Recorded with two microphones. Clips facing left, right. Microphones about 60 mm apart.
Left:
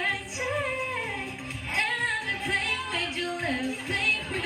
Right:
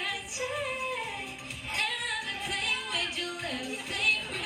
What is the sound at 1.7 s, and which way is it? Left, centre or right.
Music, left.